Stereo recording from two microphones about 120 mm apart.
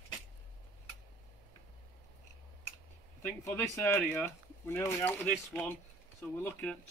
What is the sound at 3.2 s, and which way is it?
Speech, 20° left (ahead or behind).